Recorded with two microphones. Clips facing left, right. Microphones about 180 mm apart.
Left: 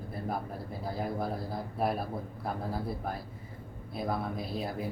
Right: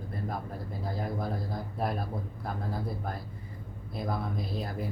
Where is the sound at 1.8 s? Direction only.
5° left (ahead or behind).